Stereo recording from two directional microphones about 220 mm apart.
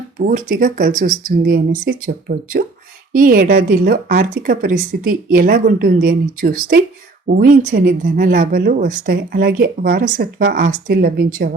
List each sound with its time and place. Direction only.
0.2 s speech: 40° right (ahead or behind)